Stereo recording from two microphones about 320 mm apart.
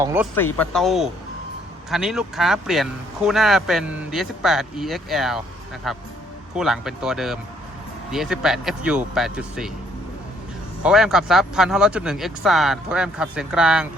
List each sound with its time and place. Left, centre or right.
0.0 s speech: centre
0.5 s speech: centre
10.8 s speech: centre